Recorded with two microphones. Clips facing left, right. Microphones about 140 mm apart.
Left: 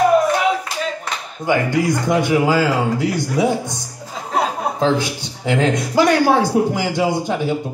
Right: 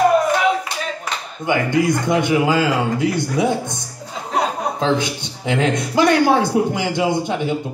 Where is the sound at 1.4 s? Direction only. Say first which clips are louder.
Even; 20° right (ahead or behind).